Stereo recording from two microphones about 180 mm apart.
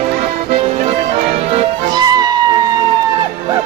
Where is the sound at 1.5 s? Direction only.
25° right (ahead or behind).